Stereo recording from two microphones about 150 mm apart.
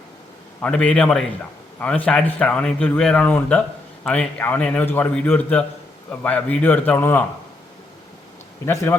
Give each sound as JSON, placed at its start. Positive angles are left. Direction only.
{"t": 0.6, "sound": "a man's voice", "side_deg": 10}
{"t": 8.6, "sound": "a man's voice", "side_deg": 15}